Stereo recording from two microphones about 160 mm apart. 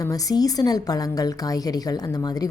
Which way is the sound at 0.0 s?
20° left (ahead or behind).